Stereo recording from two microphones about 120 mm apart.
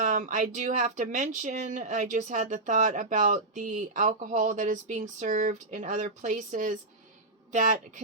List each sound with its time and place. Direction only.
0.0 s speech: 90° right